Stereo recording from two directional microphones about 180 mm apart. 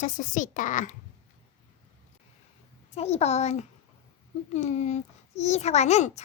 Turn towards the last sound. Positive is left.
turn(degrees=40)  # may be behind; listen again after turning